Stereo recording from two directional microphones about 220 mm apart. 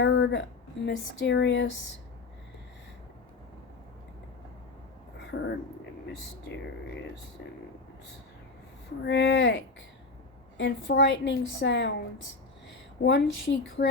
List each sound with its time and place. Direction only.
0.0 s a woman's voice: 55° left (ahead or behind)
5.3 s a woman's voice: 50° left (ahead or behind)
9.0 s a woman's voice: 50° left (ahead or behind)
10.6 s a woman's voice: 50° left (ahead or behind)
13.0 s a woman's voice: 55° left (ahead or behind)